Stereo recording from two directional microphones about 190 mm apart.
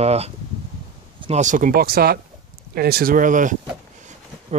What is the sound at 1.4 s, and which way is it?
Speech, 45° right (ahead or behind).